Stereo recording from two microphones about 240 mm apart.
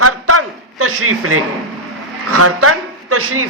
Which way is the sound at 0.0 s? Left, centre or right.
Right.